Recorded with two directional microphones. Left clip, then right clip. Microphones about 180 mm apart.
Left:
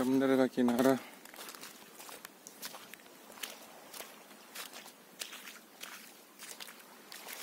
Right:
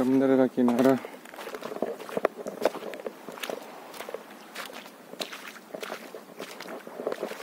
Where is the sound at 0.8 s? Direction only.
20° left (ahead or behind).